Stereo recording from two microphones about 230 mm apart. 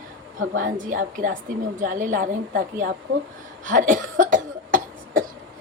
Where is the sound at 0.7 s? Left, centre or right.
Right.